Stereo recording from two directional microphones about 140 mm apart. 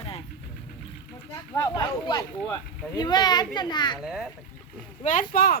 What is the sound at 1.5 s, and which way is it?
A child's voice, 30° left (ahead or behind).